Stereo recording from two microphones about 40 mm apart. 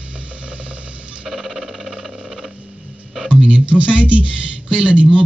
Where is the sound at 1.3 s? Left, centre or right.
Centre.